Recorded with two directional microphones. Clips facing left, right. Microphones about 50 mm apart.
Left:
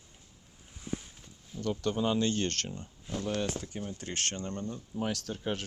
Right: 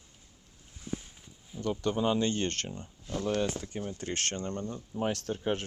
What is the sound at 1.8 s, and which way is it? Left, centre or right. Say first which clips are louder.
Speech: right 1 dB; centre.